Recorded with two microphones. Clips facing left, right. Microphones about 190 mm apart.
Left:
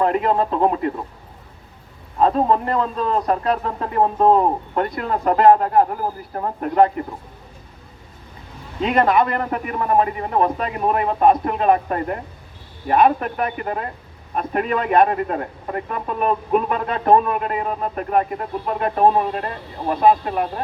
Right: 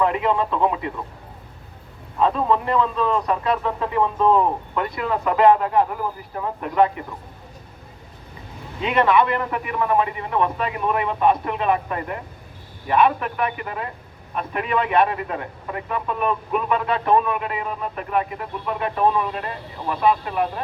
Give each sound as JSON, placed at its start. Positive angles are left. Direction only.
{"t": 0.0, "sound": "a man's voice", "side_deg": 40}
{"t": 2.1, "sound": "a man's voice", "side_deg": 40}
{"t": 8.8, "sound": "a man's voice", "side_deg": 40}